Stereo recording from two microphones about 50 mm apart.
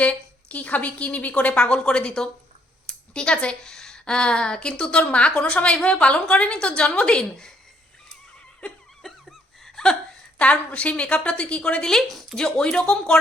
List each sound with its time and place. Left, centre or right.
0.0 s a woman's voice: left
9.0 s laughter: centre
10.3 s a woman's voice: left
12.0 s speech: centre